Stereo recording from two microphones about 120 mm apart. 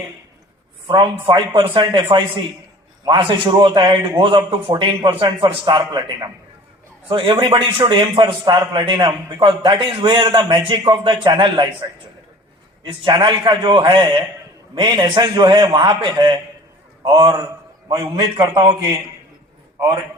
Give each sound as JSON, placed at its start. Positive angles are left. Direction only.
{"t": 0.9, "sound": "a man's voice", "side_deg": -40}